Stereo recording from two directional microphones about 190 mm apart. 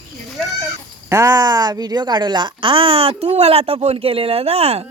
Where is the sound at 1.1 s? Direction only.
15° right (ahead or behind); by 4.8 s 30° right (ahead or behind).